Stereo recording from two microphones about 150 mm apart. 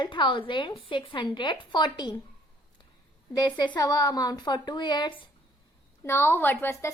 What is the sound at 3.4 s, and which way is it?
A woman's voice, 30° left (ahead or behind).